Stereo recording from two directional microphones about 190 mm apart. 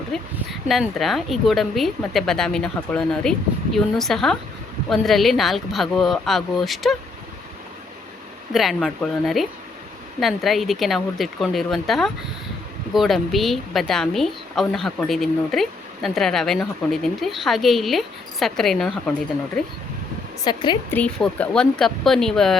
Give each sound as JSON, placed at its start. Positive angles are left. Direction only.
{"t": 0.1, "sound": "a woman's voice", "side_deg": 0}
{"t": 8.5, "sound": "a woman's voice", "side_deg": 0}
{"t": 20.4, "sound": "speech", "side_deg": 25}
{"t": 20.9, "sound": "a woman's voice", "side_deg": 5}